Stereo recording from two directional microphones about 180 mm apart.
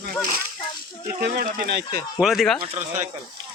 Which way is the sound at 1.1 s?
60° right (ahead or behind).